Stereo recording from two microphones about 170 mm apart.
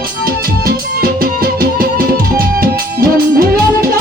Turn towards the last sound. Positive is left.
turn(degrees=-60)  # may be behind; listen again after turning